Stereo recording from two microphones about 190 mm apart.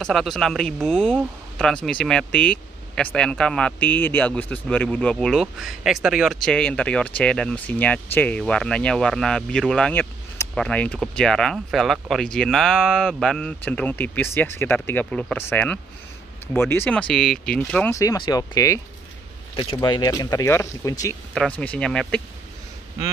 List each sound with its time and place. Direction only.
0.0 s speech: centre (ahead or behind)
17.9 s speech: 20° left (ahead or behind)
21.4 s speech: 5° left (ahead or behind)